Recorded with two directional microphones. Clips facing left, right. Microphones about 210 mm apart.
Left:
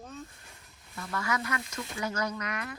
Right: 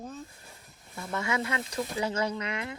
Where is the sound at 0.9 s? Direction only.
25° right (ahead or behind).